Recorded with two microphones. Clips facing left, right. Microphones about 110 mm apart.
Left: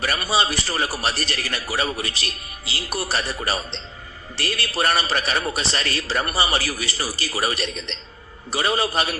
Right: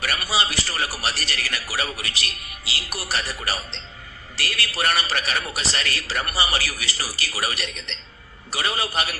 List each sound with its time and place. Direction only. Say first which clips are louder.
0.0 s a man's voice: left 3 dB; 30° left (ahead or behind)